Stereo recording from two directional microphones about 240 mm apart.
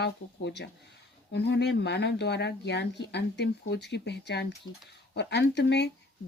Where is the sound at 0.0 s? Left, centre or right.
Left.